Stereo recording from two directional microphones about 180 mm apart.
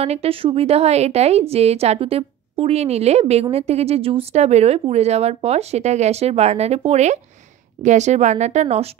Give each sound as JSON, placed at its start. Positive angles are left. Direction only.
{"t": 0.0, "sound": "a woman's voice", "side_deg": -35}